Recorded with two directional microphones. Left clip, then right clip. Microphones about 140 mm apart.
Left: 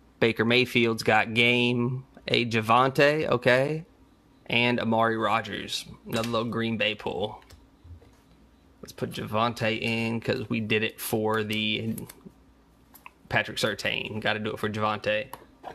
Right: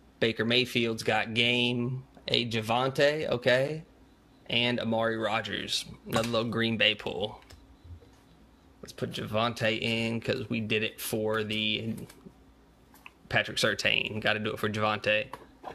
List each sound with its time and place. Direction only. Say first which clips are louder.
0.2 s speech: left 4 dB; 40° left (ahead or behind)
8.8 s speech: left 2 dB; 30° left (ahead or behind)
13.0 s a sound: left 2 dB; 25° left (ahead or behind)
13.7 s speech: right 2 dB; 15° left (ahead or behind)